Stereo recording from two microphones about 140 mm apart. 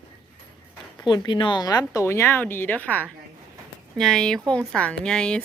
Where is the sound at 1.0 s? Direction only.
35° left (ahead or behind); by 5.4 s 5° left (ahead or behind).